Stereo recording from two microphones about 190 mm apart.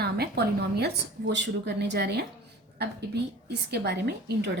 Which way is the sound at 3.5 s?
60° right (ahead or behind).